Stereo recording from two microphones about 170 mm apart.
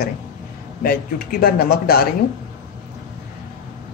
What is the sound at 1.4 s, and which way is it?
Speech, 65° left (ahead or behind).